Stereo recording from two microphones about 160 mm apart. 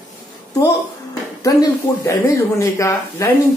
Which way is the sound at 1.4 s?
20° left (ahead or behind).